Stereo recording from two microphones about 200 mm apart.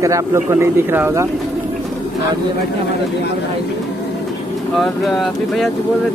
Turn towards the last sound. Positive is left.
turn(degrees=0)  # may be behind; listen again after turning